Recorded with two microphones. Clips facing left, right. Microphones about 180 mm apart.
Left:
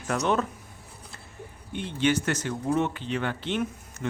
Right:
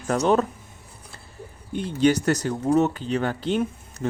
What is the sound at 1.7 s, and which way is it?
Speech, 40° right (ahead or behind).